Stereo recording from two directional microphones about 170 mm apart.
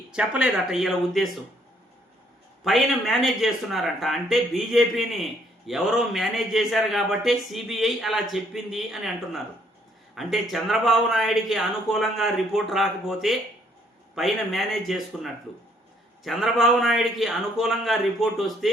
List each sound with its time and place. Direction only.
0.1 s speech: 5° right (ahead or behind)
2.6 s speech: centre (ahead or behind)